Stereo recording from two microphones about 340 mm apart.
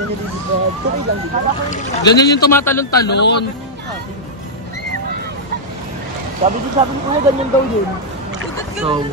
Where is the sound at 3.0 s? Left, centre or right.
Left.